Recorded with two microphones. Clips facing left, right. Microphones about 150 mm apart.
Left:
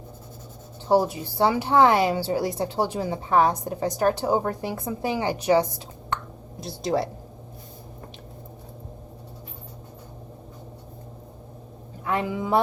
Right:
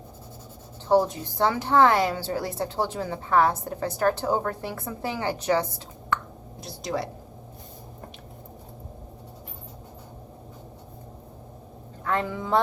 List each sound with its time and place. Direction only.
0.9 s a woman's voice: 10° left (ahead or behind)
6.6 s a woman's voice: 30° left (ahead or behind)
12.0 s speech: 10° left (ahead or behind)